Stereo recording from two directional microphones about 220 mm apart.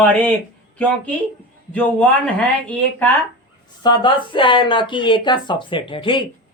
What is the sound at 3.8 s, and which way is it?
Speech, 20° left (ahead or behind).